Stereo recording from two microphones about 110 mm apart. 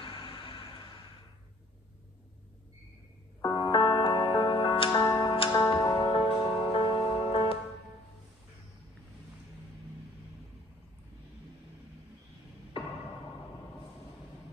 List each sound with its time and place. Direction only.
0.0 s music: 55° left (ahead or behind)
3.4 s music: 45° left (ahead or behind)
4.8 s music: 35° left (ahead or behind)
5.3 s music: 55° left (ahead or behind)
5.7 s music: 30° left (ahead or behind)
5.9 s music: 45° left (ahead or behind)